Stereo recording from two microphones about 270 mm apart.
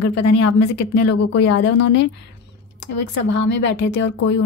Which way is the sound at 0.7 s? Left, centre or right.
Left.